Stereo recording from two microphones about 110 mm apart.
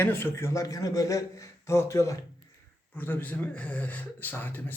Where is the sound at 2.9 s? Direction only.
15° left (ahead or behind).